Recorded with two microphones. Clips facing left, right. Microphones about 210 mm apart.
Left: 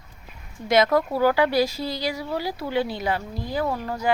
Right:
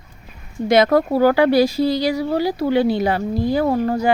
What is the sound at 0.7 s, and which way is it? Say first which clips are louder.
Speech: right 5 dB; 65° right (ahead or behind).